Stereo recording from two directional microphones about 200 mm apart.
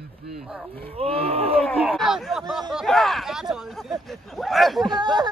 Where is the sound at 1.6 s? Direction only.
5° left (ahead or behind).